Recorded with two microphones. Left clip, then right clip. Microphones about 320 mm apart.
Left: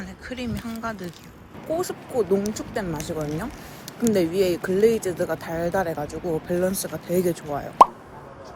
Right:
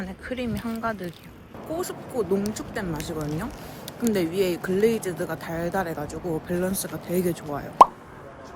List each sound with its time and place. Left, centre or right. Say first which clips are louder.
0.0 s speech: right 2 dB; centre